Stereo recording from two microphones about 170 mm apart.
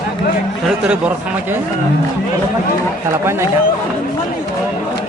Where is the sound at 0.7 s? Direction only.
5° right (ahead or behind).